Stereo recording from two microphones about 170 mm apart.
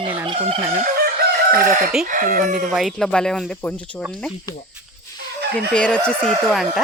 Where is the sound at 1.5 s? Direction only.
55° right (ahead or behind).